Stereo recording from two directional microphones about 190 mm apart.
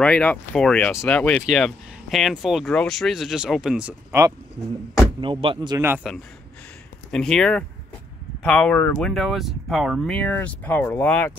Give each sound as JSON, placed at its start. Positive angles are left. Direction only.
{"t": 0.0, "sound": "speech", "side_deg": 5}
{"t": 5.2, "sound": "speech", "side_deg": -25}
{"t": 6.0, "sound": "speech", "side_deg": 0}